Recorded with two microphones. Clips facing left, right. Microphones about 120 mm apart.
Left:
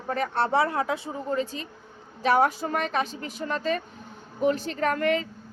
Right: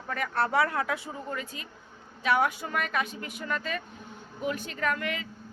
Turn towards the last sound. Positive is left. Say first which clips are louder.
# left 7 dB
turn(degrees=40)  # may be behind; listen again after turning